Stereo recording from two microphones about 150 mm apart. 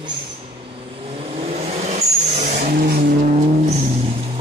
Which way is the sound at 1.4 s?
50° right (ahead or behind).